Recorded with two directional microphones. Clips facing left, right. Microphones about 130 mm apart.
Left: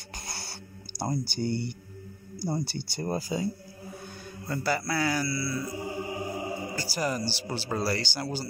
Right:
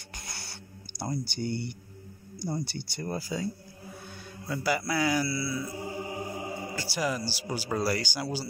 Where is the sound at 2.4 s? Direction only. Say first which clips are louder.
Left 2 dB; 30° left (ahead or behind).